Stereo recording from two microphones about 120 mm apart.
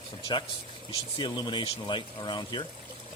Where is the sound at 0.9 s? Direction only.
40° left (ahead or behind).